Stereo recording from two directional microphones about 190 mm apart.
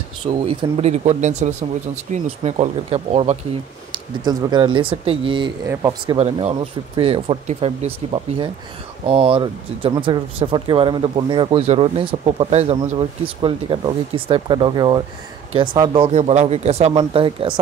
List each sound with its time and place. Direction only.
0.3 s speech: 30° right (ahead or behind)
3.9 s speech: 20° right (ahead or behind)
6.1 s speech: 30° right (ahead or behind)